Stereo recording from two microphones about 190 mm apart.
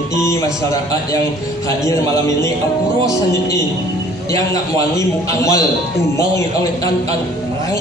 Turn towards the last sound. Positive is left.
turn(degrees=15)  # may be behind; listen again after turning